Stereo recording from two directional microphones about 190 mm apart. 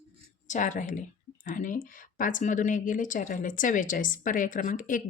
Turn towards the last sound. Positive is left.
turn(degrees=45)  # may be behind; listen again after turning